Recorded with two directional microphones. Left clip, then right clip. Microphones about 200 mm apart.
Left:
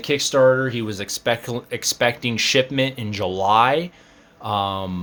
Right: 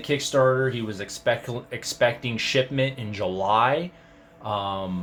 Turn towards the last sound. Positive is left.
turn(degrees=50)  # may be behind; listen again after turning